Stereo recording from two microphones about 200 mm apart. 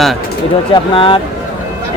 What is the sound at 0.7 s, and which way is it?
Speech, 25° left (ahead or behind).